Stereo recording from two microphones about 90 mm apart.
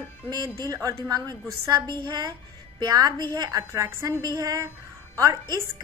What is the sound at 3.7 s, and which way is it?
A woman's voice, 35° right (ahead or behind).